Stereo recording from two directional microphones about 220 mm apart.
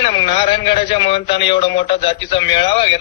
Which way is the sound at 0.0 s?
25° left (ahead or behind).